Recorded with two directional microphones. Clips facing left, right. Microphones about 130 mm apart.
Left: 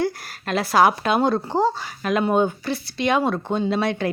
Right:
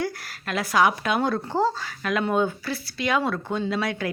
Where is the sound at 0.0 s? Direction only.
25° left (ahead or behind).